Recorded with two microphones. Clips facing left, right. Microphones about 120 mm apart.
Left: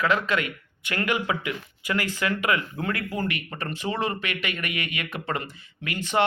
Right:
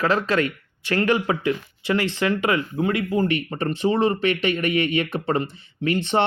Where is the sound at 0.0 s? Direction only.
35° right (ahead or behind).